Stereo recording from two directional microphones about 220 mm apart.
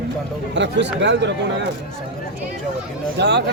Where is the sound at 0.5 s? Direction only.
55° right (ahead or behind).